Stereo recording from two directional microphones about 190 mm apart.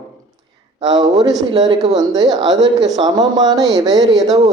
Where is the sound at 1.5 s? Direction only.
20° right (ahead or behind).